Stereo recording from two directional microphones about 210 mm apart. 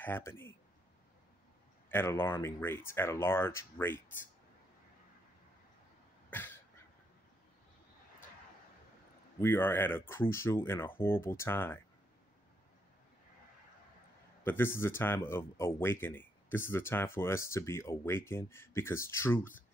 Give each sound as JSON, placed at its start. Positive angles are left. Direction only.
{"t": 0.0, "sound": "speech", "side_deg": 10}
{"t": 1.9, "sound": "speech", "side_deg": 10}
{"t": 9.4, "sound": "speech", "side_deg": 10}
{"t": 14.4, "sound": "speech", "side_deg": 10}